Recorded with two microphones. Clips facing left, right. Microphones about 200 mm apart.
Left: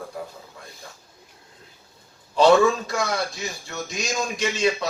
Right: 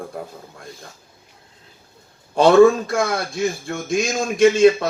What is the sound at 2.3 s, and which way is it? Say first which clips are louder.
A man's voice: right 5 dB; 55° right (ahead or behind).